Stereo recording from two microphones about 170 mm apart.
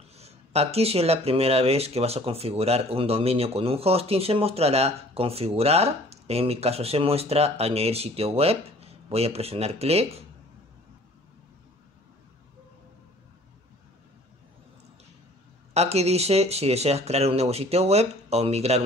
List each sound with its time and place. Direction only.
0.2 s speech: 40° right (ahead or behind)
15.7 s speech: 40° right (ahead or behind)